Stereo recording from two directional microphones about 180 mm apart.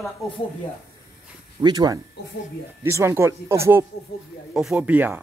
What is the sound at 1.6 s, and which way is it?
Speech, 20° right (ahead or behind).